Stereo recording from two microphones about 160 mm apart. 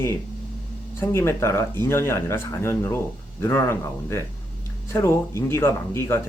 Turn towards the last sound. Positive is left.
turn(degrees=15)  # may be behind; listen again after turning